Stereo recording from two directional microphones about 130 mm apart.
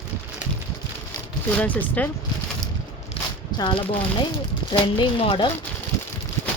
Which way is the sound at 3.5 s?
35° left (ahead or behind).